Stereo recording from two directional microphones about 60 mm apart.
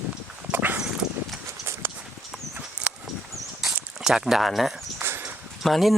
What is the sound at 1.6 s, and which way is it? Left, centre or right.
Horse, right.